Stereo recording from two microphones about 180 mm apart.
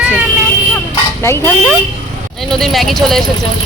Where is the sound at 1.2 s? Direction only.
15° left (ahead or behind).